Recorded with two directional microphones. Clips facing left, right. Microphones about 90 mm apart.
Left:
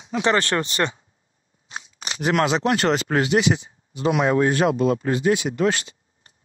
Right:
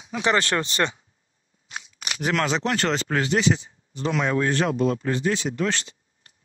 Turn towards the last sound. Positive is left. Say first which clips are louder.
# left 4 dB
turn(degrees=15)  # may be behind; listen again after turning